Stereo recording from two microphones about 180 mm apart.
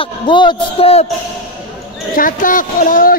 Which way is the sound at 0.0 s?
25° left (ahead or behind).